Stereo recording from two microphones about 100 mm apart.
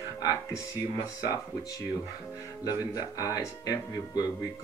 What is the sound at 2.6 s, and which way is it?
Speech, 35° left (ahead or behind).